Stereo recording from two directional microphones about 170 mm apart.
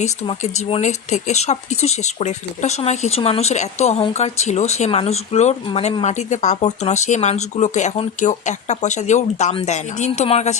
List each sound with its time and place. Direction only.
0.0 s speech: 40° left (ahead or behind)